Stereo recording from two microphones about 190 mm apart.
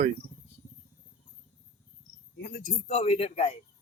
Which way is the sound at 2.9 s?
30° left (ahead or behind).